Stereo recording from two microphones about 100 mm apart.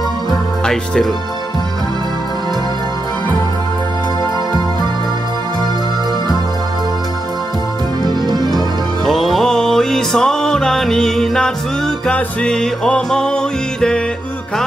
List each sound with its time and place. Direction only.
8.1 s music: 45° right (ahead or behind)
9.0 s music: centre (ahead or behind)